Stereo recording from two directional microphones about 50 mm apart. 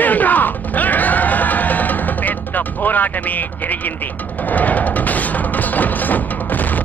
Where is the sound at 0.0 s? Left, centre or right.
Left.